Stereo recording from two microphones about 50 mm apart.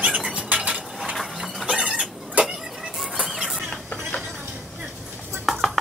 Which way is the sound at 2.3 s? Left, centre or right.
Centre.